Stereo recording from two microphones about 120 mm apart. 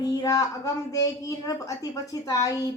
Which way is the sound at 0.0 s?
30° left (ahead or behind).